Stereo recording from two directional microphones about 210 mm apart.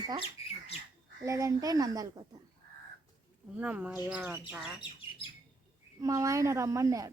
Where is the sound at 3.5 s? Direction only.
5° right (ahead or behind).